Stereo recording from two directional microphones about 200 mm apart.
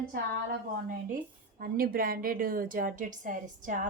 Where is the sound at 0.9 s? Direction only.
45° right (ahead or behind).